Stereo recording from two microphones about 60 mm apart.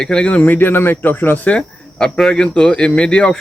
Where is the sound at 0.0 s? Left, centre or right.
Centre; by 1.4 s left.